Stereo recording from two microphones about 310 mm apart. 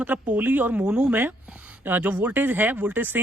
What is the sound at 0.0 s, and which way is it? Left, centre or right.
A woman's voice, centre.